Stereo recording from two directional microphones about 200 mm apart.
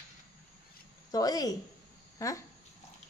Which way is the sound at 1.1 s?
20° left (ahead or behind).